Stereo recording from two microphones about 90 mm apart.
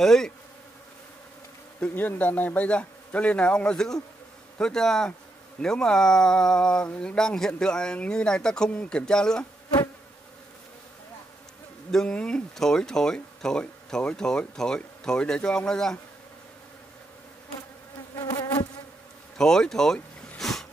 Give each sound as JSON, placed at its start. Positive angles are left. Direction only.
{"t": 0.0, "sound": "bee", "side_deg": 5}
{"t": 1.8, "sound": "speech", "side_deg": 20}
{"t": 11.9, "sound": "speech", "side_deg": 10}
{"t": 18.1, "sound": "insect", "side_deg": 45}
{"t": 19.3, "sound": "speech", "side_deg": 5}
{"t": 20.3, "sound": "a sound", "side_deg": 5}